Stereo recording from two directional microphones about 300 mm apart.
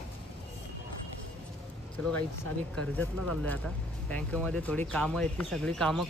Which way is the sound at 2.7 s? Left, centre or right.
Centre.